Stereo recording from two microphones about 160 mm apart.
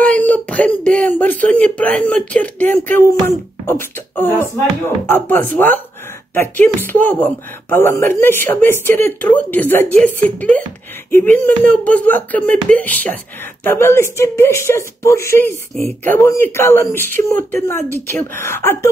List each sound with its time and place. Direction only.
0.0 s speech: 10° left (ahead or behind)